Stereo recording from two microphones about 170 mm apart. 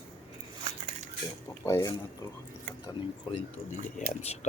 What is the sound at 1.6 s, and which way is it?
Speech, 20° left (ahead or behind).